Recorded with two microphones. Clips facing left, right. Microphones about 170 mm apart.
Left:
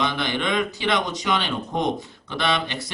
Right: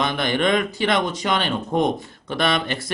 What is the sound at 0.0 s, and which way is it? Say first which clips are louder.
Speech: right 4 dB; 50° right (ahead or behind).